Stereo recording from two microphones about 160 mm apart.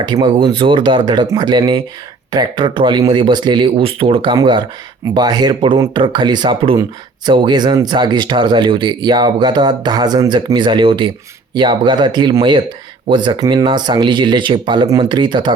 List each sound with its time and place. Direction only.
0.0 s speech: 30° right (ahead or behind)